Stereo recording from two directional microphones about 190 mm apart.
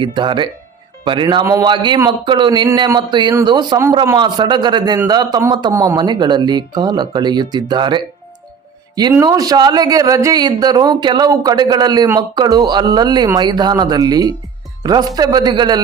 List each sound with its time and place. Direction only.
0.0 s speech: 25° right (ahead or behind)
9.1 s speech: 20° right (ahead or behind)